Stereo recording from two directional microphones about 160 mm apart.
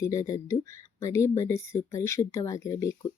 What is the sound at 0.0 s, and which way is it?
Speech, 20° left (ahead or behind).